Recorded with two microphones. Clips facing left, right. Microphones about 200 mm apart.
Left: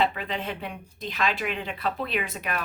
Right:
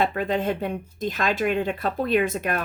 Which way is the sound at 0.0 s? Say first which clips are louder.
Right 4 dB; 45° right (ahead or behind).